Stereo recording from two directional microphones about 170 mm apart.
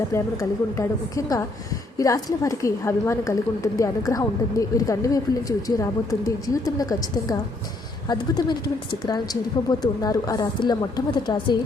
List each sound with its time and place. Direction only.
0.8 s a woman's voice: 20° left (ahead or behind)
8.1 s a woman's voice: 25° left (ahead or behind)